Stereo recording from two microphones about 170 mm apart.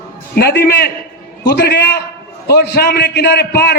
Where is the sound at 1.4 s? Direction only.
75° left (ahead or behind).